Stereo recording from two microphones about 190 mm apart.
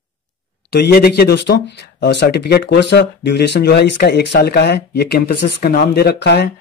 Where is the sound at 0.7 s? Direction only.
55° left (ahead or behind).